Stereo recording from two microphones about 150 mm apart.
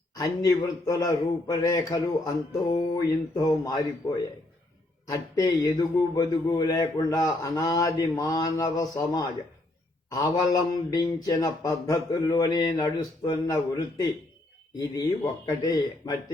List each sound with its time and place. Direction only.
0.2 s a man's voice: 25° left (ahead or behind)
5.1 s a man's voice: 20° left (ahead or behind)